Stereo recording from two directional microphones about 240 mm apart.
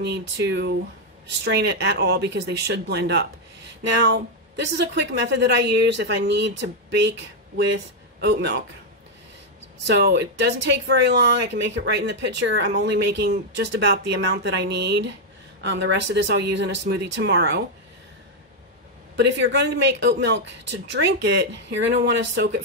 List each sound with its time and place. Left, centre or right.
0.0 s speech: right
9.8 s speech: right
19.1 s speech: right